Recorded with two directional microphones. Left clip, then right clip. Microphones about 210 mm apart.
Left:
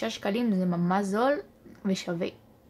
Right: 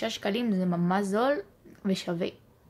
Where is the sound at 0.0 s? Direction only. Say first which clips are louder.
Even; centre (ahead or behind).